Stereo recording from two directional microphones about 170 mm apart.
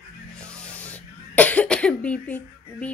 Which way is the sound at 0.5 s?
5° left (ahead or behind).